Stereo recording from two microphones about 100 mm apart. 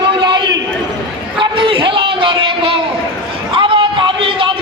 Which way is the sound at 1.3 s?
60° right (ahead or behind).